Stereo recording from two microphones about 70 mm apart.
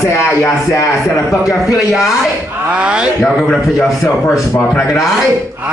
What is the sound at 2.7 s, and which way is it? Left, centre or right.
Speech, centre.